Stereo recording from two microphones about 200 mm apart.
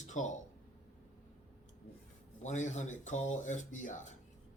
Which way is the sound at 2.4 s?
35° left (ahead or behind).